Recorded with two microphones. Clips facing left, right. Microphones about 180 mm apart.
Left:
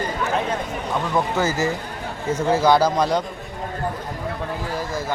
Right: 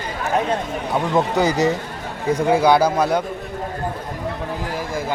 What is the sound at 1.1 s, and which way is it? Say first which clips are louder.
A man's voice: right 4 dB; 20° right (ahead or behind).